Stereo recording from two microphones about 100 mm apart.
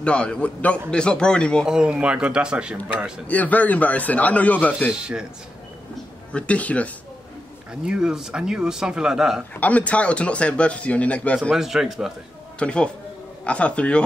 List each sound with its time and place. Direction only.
0.0 s a man's voice: 10° left (ahead or behind)
1.7 s speech: 10° right (ahead or behind)
3.3 s a man's voice: 15° left (ahead or behind)
4.9 s speech: 10° right (ahead or behind)
6.3 s a man's voice: 15° left (ahead or behind)
7.8 s speech: 5° right (ahead or behind)
9.6 s a man's voice: 15° left (ahead or behind)
11.5 s speech: 5° right (ahead or behind)
12.5 s a man's voice: 10° left (ahead or behind)